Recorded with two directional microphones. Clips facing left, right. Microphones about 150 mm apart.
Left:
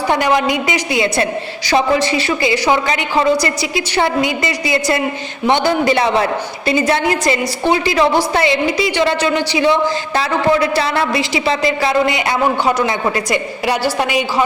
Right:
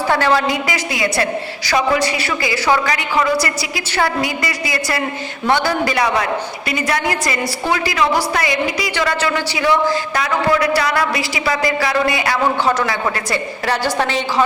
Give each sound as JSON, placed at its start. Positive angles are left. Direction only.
{"t": 0.1, "sound": "a woman's voice", "side_deg": 15}